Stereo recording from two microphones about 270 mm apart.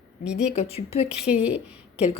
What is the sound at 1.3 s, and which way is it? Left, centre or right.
Speech, centre.